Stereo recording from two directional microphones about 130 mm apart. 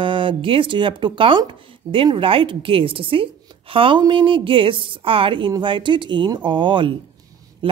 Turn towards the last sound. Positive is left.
turn(degrees=-40)  # may be behind; listen again after turning